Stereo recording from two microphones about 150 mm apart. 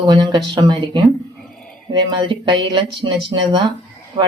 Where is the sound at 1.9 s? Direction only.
30° right (ahead or behind).